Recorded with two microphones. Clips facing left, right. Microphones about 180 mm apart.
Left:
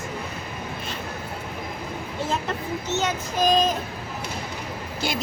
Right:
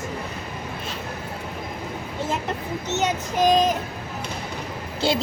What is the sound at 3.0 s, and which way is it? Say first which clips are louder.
Child singing: right 3 dB; 15° right (ahead or behind).